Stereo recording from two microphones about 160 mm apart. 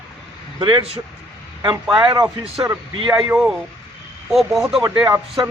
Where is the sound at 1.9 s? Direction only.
25° right (ahead or behind).